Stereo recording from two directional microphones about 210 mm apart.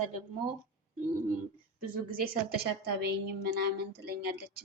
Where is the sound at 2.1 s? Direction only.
45° right (ahead or behind).